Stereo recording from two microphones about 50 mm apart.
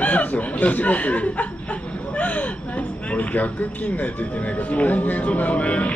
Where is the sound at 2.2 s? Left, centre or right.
Left.